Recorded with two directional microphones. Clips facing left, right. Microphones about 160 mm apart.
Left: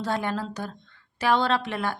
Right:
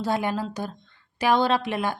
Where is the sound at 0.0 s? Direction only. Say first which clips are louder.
Right 2 dB; 10° right (ahead or behind).